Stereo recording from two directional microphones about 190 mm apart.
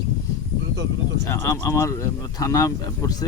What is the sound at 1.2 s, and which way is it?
Speech, 15° left (ahead or behind).